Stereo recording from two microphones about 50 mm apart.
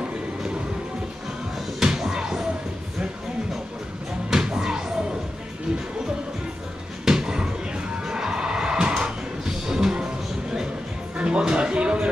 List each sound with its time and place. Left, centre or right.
1.8 s music: centre
4.3 s music: centre
7.1 s music: centre
11.1 s a sound: right